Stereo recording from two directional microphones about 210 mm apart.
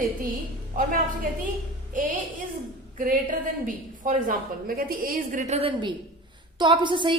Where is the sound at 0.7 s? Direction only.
40° right (ahead or behind).